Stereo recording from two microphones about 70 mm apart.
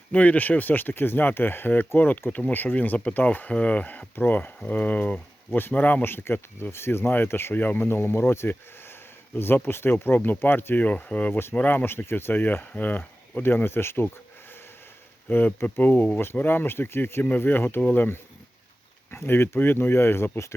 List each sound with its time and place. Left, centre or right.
0.1 s speech: left
15.3 s speech: left